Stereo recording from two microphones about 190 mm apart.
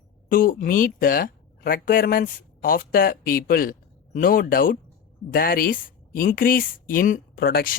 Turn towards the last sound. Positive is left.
turn(degrees=50)  # may be behind; listen again after turning